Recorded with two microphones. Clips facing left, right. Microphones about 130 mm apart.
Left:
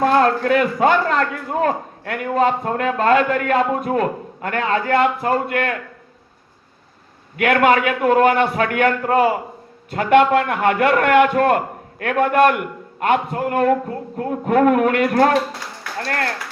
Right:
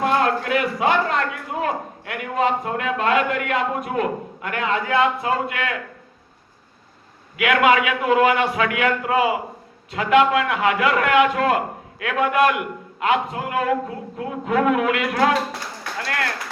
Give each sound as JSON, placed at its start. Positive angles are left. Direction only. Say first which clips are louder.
{"t": 0.0, "sound": "a man's voice", "louder": "left 4 dB", "side_deg": 40}
{"t": 4.9, "sound": "a man's voice", "louder": "left 2 dB", "side_deg": 50}
{"t": 7.3, "sound": "a man's voice", "louder": "left 2 dB", "side_deg": 45}